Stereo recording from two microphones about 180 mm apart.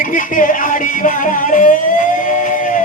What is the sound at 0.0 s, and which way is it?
Music, 45° left (ahead or behind).